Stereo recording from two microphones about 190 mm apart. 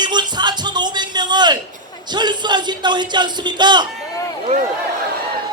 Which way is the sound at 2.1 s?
25° right (ahead or behind).